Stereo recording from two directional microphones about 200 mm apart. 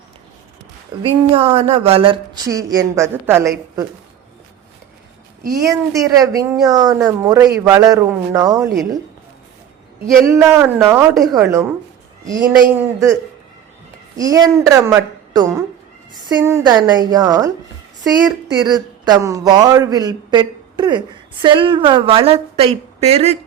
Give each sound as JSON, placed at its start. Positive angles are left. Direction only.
{"t": 1.0, "sound": "speech", "side_deg": -25}
{"t": 5.7, "sound": "a woman's voice", "side_deg": -15}
{"t": 10.2, "sound": "a woman's voice", "side_deg": -15}
{"t": 12.2, "sound": "a woman's voice", "side_deg": -15}
{"t": 14.2, "sound": "a woman's voice", "side_deg": -20}
{"t": 18.6, "sound": "speech", "side_deg": -20}